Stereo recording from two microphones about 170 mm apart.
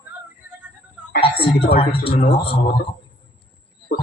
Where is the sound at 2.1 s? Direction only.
60° left (ahead or behind).